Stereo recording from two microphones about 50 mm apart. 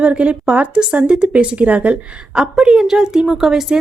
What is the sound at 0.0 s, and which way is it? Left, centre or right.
Speech, right.